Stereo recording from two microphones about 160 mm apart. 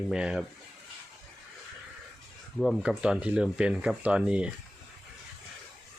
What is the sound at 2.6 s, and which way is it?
Speech, 5° right (ahead or behind).